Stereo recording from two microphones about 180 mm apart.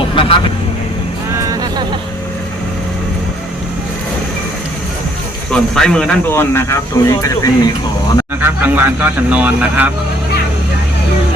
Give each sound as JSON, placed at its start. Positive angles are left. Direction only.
{"t": 0.2, "sound": "vehicle", "side_deg": 30}
{"t": 5.5, "sound": "speech", "side_deg": 5}
{"t": 8.4, "sound": "speech", "side_deg": -10}